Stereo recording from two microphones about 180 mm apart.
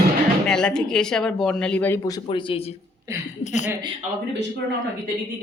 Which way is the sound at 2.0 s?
25° left (ahead or behind).